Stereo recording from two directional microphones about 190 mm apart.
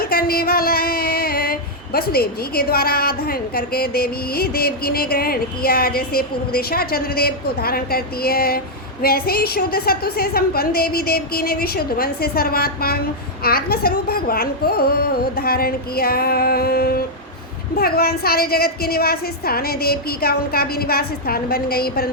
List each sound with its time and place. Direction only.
0.0 s female singing: 50° left (ahead or behind)